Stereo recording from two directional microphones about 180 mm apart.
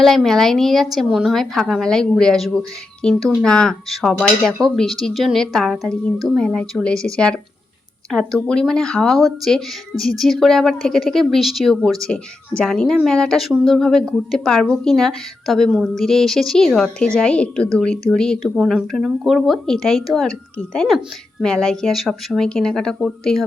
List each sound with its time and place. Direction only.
0.0 s a woman's voice: centre (ahead or behind)